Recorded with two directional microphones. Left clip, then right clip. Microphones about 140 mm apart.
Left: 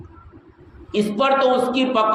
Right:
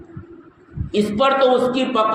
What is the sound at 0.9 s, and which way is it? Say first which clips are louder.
A man's voice: right 1 dB; 30° right (ahead or behind).